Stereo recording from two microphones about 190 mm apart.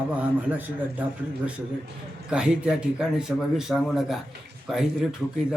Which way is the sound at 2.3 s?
5° right (ahead or behind).